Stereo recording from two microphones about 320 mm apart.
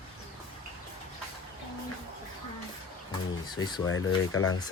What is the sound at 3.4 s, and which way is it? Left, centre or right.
Speech, centre.